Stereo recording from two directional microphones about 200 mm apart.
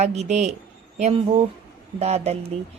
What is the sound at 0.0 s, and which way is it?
Speech, 35° right (ahead or behind).